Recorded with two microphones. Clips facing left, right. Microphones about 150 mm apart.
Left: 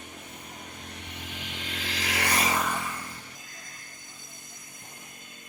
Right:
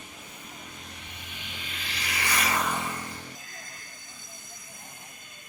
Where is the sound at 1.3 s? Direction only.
85° left; by 2.3 s 70° left (ahead or behind).